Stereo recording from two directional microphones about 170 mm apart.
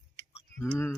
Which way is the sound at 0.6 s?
15° left (ahead or behind).